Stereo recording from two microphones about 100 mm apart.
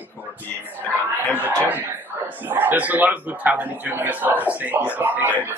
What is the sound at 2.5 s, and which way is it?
Speech, 20° right (ahead or behind).